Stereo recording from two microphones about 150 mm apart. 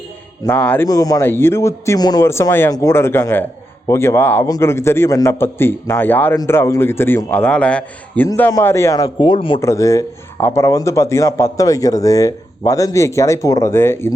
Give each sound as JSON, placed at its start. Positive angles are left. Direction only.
{"t": 0.4, "sound": "a man's voice", "side_deg": 10}
{"t": 0.9, "sound": "a man's voice", "side_deg": 25}
{"t": 9.0, "sound": "speech", "side_deg": 30}
{"t": 9.6, "sound": "speech", "side_deg": 20}